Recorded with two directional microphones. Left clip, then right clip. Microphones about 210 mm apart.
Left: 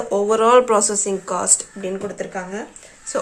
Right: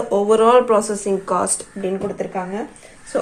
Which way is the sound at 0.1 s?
10° left (ahead or behind).